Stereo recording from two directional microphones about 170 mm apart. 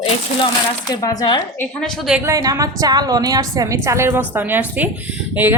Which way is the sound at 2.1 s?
20° right (ahead or behind).